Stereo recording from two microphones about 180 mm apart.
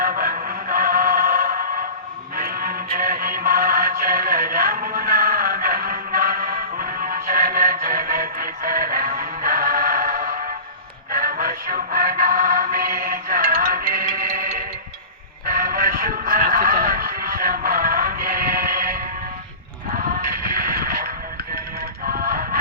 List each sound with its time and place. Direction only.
0.2 s music: 55° right (ahead or behind)
15.4 s music: 55° right (ahead or behind)
20.7 s radio: 55° right (ahead or behind)
22.1 s music: 55° right (ahead or behind)